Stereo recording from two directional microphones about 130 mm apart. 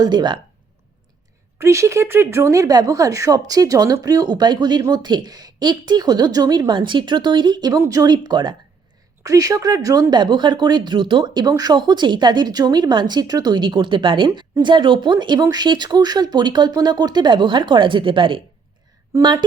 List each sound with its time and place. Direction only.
0.0 s speech: 35° right (ahead or behind)
1.5 s speech: 20° right (ahead or behind)